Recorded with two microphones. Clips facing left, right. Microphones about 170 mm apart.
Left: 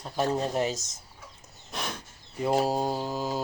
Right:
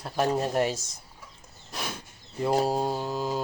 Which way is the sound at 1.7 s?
Centre (ahead or behind).